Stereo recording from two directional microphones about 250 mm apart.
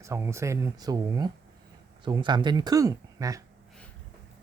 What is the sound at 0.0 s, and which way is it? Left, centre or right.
Speech, centre.